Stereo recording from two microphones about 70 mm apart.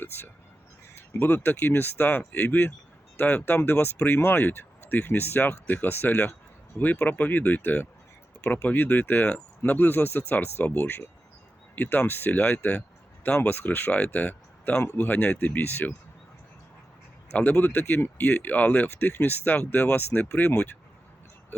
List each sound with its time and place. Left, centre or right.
0.9 s speech: left
14.8 s speech: left
17.3 s speech: left